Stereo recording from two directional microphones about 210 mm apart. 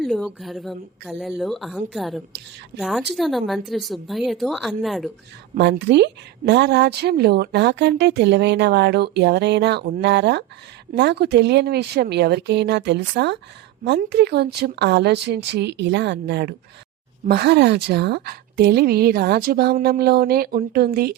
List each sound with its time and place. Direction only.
0.0 s speech: centre (ahead or behind)
5.5 s a woman's voice: 55° right (ahead or behind)